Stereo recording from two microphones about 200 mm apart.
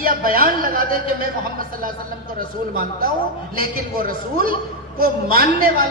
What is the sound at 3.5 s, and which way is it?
A woman's voice, 45° right (ahead or behind).